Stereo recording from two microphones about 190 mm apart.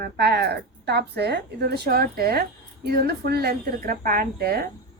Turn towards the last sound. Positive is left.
turn(degrees=-55)  # may be behind; listen again after turning